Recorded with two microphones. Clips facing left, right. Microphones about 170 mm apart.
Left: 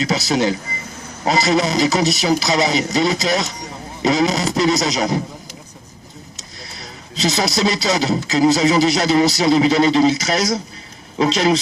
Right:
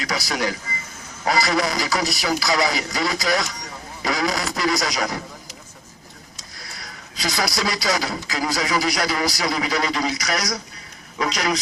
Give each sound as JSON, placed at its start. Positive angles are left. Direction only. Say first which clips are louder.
{"t": 0.0, "sound": "speech", "louder": "left 7 dB", "side_deg": 25}
{"t": 6.3, "sound": "speech", "louder": "left 4 dB", "side_deg": 25}